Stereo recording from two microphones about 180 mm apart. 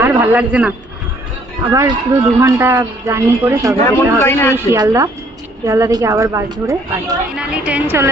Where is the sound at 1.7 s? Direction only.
15° right (ahead or behind).